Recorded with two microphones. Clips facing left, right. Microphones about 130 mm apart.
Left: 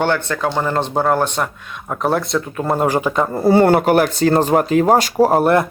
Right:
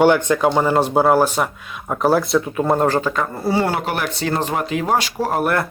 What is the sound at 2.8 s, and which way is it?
Speech, 15° left (ahead or behind).